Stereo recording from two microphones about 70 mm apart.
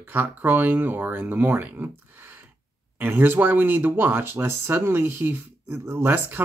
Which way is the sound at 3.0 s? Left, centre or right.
Right.